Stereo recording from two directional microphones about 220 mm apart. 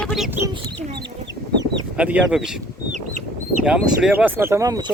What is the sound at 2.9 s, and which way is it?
Chicken, 35° right (ahead or behind).